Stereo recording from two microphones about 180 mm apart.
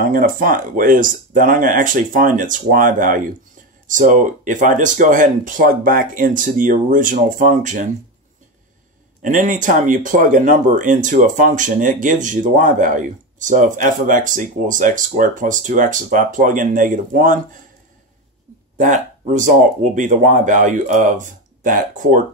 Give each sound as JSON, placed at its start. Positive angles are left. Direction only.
{"t": 0.0, "sound": "speech", "side_deg": -50}
{"t": 9.2, "sound": "speech", "side_deg": -45}
{"t": 18.8, "sound": "speech", "side_deg": -45}